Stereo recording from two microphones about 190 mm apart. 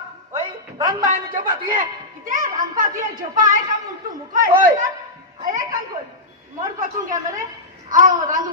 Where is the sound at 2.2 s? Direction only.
45° right (ahead or behind).